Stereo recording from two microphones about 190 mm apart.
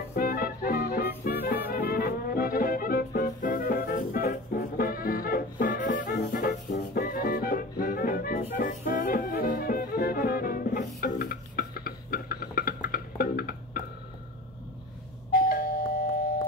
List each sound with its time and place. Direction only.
0.1 s music: 50° left (ahead or behind)
7.0 s music: 55° left (ahead or behind)
15.3 s doorbell: 50° left (ahead or behind)